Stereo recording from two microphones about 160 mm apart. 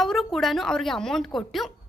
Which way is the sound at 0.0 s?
Centre (ahead or behind).